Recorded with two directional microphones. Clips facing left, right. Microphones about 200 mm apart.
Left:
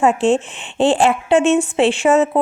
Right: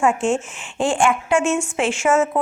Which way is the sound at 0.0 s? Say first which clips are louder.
Left 4 dB; 35° left (ahead or behind).